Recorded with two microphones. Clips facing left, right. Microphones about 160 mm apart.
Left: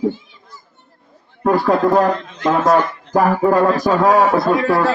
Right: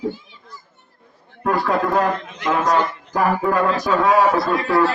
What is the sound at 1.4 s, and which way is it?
Speech, 35° left (ahead or behind).